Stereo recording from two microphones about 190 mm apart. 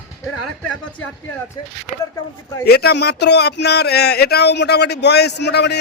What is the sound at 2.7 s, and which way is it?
Speech, 55° left (ahead or behind).